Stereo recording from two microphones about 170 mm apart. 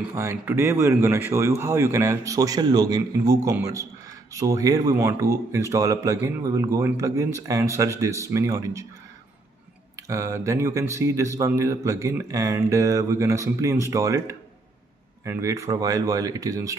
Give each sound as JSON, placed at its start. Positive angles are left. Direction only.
{"t": 0.1, "sound": "speech", "side_deg": -15}
{"t": 9.9, "sound": "speech", "side_deg": -20}